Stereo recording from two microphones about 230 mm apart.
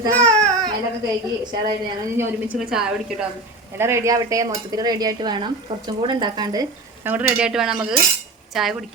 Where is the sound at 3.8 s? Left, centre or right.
Centre.